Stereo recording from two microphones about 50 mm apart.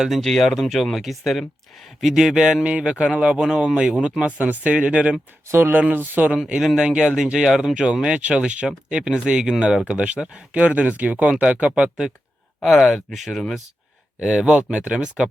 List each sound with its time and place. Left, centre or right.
0.2 s speech: centre
0.4 s speech: centre; by 5.1 s right
5.5 s speech: right
5.9 s speech: right
6.3 s speech: centre
12.6 s speech: centre
14.2 s speech: centre